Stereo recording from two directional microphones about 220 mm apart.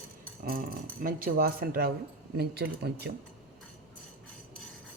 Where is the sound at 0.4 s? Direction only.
40° right (ahead or behind).